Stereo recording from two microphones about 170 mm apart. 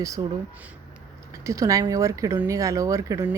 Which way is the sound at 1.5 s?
20° right (ahead or behind).